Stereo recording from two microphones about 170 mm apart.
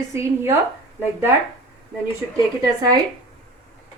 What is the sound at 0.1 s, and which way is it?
Speech, 15° right (ahead or behind).